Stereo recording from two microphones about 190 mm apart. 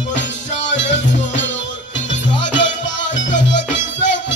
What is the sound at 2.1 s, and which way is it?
Music, 70° left (ahead or behind).